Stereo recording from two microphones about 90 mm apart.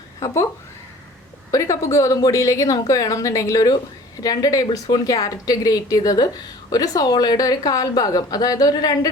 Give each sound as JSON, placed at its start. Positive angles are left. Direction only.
{"t": 0.2, "sound": "a woman's voice", "side_deg": 35}
{"t": 1.5, "sound": "a woman's voice", "side_deg": 35}